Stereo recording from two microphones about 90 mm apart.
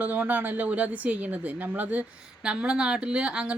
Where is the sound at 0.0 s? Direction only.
20° right (ahead or behind).